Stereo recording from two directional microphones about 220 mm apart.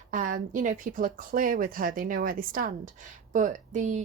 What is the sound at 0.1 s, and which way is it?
A woman's voice, 35° right (ahead or behind).